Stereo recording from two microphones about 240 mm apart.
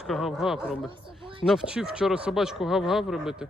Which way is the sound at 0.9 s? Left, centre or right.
Right.